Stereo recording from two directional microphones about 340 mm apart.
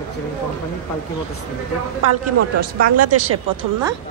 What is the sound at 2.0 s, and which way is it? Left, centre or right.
A woman's voice, right.